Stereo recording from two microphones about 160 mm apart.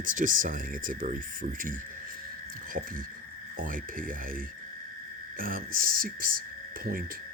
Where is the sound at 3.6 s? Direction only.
60° right (ahead or behind).